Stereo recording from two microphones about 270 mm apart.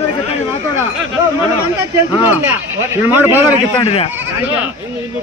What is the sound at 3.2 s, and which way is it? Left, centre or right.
Speech, centre.